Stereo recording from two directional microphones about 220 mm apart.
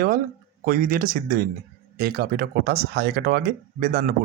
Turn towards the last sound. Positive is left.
turn(degrees=-40)  # may be behind; listen again after turning